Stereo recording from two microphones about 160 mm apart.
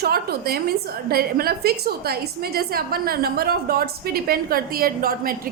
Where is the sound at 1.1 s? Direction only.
75° right (ahead or behind).